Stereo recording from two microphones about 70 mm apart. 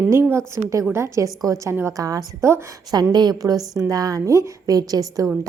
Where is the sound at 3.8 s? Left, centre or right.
Right.